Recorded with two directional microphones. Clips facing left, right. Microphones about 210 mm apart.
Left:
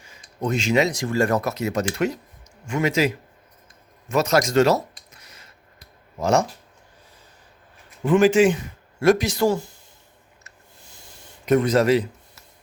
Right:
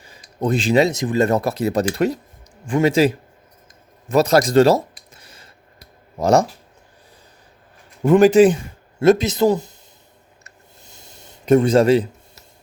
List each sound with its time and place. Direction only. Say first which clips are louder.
0.0 s speech: right 4 dB; 35° right (ahead or behind)
5.1 s a sound: right 3 dB; 30° right (ahead or behind)
6.1 s speech: right 5 dB; 35° right (ahead or behind)
8.0 s speech: right 5 dB; 40° right (ahead or behind)
9.0 s speech: right 4 dB; 25° right (ahead or behind)
11.2 s speech: right 4 dB; 30° right (ahead or behind)